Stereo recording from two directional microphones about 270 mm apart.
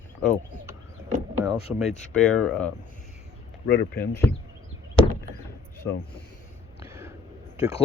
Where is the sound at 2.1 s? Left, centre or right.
Centre.